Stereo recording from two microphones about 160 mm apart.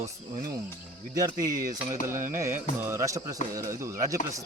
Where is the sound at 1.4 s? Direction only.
60° right (ahead or behind).